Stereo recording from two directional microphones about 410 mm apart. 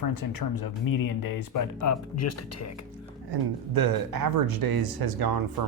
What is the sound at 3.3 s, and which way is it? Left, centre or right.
Speech, right.